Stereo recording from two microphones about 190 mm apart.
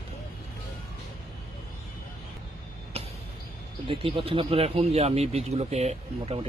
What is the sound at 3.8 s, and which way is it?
Speech, 30° right (ahead or behind).